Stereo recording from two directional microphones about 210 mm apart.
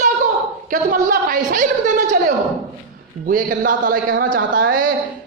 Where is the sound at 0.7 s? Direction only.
40° right (ahead or behind).